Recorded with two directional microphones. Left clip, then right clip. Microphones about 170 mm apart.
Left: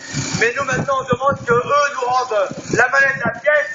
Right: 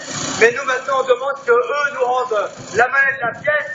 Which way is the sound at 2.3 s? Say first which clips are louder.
Left 1 dB; 40° right (ahead or behind).